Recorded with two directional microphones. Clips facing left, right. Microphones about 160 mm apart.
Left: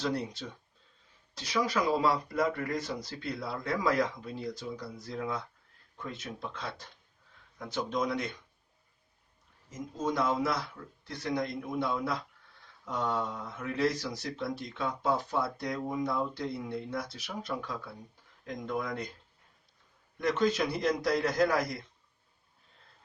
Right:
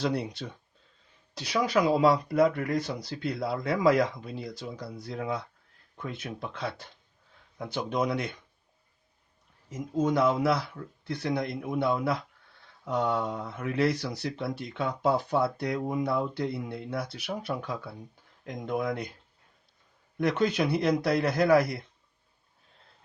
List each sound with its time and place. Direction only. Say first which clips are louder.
0.0 s speech: right 3 dB; 65° right (ahead or behind)
9.6 s speech: right 6 dB; 65° right (ahead or behind)
20.1 s speech: right 2 dB; 60° right (ahead or behind)